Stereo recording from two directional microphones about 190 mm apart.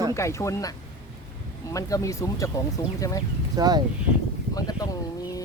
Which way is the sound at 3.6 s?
20° right (ahead or behind).